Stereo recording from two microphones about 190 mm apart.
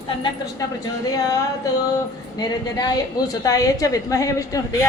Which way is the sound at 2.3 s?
20° left (ahead or behind).